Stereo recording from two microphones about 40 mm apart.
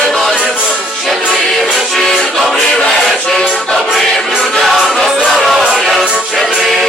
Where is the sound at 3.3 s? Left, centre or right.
Centre.